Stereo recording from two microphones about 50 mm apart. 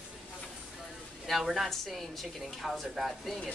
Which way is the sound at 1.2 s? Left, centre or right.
Centre.